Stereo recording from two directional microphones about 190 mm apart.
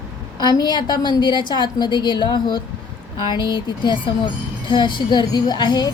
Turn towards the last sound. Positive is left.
turn(degrees=20)  # may be behind; listen again after turning